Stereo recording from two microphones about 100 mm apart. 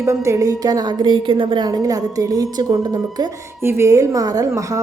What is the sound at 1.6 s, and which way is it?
A woman's voice, 40° right (ahead or behind).